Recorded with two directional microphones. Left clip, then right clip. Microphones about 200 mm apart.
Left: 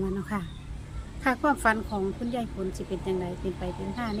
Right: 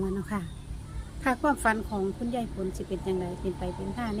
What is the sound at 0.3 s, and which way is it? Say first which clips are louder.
A woman's voice: left 1 dB; 5° left (ahead or behind).